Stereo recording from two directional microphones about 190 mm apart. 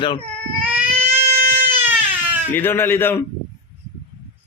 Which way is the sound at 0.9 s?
35° right (ahead or behind).